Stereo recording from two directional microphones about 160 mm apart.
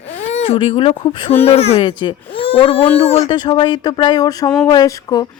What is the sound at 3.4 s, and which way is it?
Speech, 30° left (ahead or behind).